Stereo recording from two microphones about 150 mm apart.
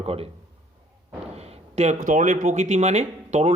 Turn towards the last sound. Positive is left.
turn(degrees=-50)  # may be behind; listen again after turning